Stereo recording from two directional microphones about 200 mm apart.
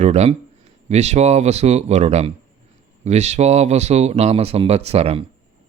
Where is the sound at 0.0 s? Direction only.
35° right (ahead or behind).